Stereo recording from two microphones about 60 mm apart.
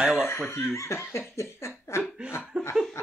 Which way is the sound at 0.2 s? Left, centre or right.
Left.